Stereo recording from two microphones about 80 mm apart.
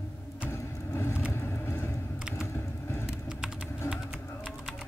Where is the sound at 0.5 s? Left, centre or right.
Left.